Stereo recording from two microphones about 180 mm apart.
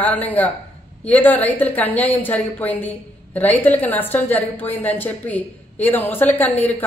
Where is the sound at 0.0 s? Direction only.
10° left (ahead or behind).